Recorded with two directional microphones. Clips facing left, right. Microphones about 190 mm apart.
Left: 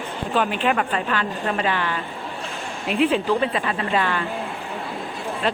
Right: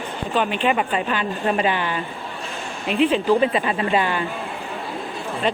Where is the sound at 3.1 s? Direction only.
Centre (ahead or behind).